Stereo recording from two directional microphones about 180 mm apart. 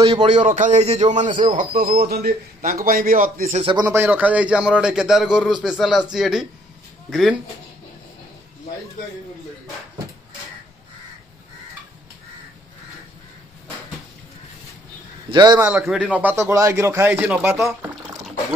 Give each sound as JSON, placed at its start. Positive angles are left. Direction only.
{"t": 0.1, "sound": "a man's voice", "side_deg": -35}
{"t": 1.3, "sound": "a man's voice", "side_deg": -25}
{"t": 1.6, "sound": "a man's voice", "side_deg": -50}
{"t": 3.6, "sound": "a man's voice", "side_deg": -20}
{"t": 15.3, "sound": "a man's voice", "side_deg": -20}
{"t": 15.7, "sound": "a man's voice", "side_deg": -5}